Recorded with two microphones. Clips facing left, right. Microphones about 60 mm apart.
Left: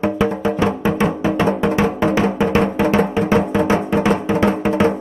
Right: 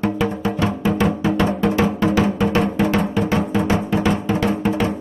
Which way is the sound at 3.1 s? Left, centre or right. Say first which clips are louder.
Left 3 dB; left.